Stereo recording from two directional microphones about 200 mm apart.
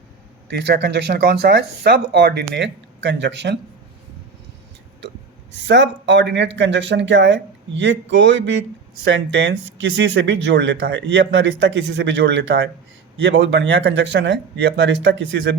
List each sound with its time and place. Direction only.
0.5 s speech: 55° right (ahead or behind)
5.5 s speech: 60° right (ahead or behind)